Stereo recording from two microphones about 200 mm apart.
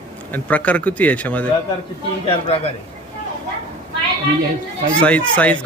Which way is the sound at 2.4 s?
30° left (ahead or behind).